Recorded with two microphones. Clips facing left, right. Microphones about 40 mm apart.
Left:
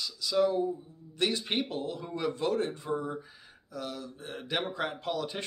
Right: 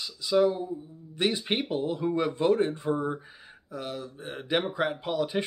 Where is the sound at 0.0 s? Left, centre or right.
Right.